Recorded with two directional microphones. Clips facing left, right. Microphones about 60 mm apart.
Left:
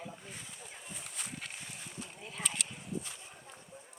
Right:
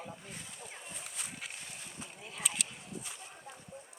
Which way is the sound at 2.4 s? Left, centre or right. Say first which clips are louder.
Even; centre.